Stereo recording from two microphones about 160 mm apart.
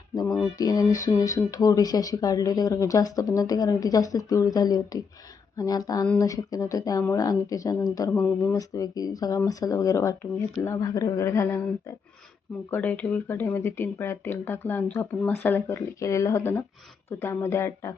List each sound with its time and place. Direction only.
0.6 s speech: 20° left (ahead or behind)